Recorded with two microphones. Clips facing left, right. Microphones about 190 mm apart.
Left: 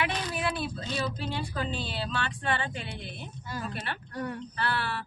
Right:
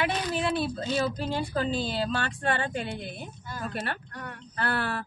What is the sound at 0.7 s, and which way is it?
A woman's voice, 45° right (ahead or behind).